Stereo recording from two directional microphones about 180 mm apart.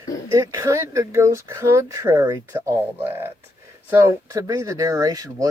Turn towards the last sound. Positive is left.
turn(degrees=-20)  # may be behind; listen again after turning